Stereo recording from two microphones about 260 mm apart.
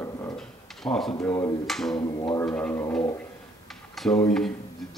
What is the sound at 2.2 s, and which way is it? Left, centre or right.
Speech, centre.